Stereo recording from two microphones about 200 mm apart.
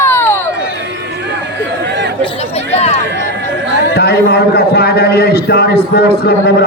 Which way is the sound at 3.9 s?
50° left (ahead or behind).